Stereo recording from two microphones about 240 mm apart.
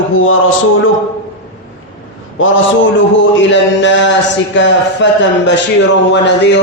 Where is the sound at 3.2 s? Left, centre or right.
Left.